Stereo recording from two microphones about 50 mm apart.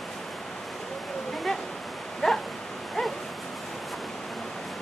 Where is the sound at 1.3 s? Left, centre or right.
Centre.